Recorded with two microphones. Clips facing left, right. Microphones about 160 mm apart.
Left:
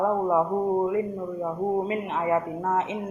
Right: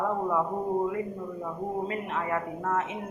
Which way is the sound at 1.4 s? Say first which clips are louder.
Left 7 dB; 20° left (ahead or behind).